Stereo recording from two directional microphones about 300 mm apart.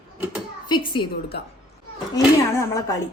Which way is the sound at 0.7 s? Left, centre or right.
Centre.